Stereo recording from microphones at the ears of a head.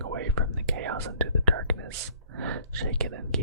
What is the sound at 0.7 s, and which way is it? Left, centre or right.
Speech, right.